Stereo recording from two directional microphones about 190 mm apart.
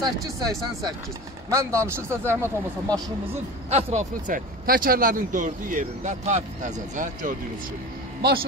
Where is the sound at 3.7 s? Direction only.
40° right (ahead or behind).